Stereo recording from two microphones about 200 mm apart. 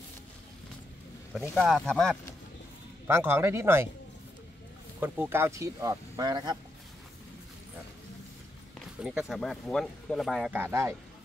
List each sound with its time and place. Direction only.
1.3 s speech: centre (ahead or behind)
3.1 s speech: 10° right (ahead or behind)
5.0 s speech: 10° right (ahead or behind)
9.0 s speech: 5° right (ahead or behind)